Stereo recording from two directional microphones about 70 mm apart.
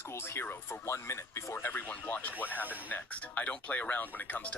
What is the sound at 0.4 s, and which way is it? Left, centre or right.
Speech, left.